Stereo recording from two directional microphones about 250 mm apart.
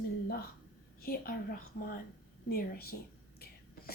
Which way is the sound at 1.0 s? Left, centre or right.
Left.